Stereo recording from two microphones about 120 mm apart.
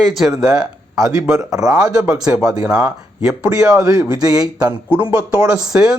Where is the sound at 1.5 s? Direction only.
30° right (ahead or behind).